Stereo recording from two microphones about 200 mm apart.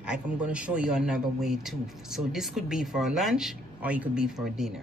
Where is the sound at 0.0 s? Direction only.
5° right (ahead or behind).